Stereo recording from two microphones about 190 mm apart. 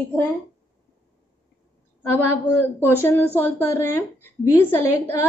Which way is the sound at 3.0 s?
10° left (ahead or behind).